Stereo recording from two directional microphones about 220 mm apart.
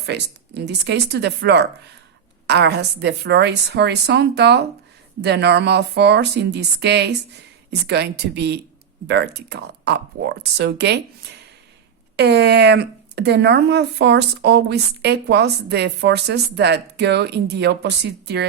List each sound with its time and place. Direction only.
0.0 s speech: 50° right (ahead or behind)